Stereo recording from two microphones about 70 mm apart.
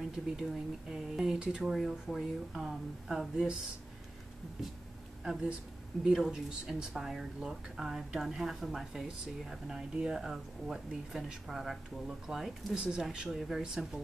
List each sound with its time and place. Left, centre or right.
0.4 s speech: centre
5.2 s speech: centre